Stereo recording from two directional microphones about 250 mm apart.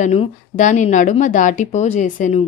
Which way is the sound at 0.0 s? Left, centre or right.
Left.